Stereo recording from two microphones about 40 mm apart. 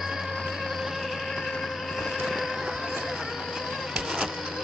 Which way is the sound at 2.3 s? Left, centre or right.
Centre.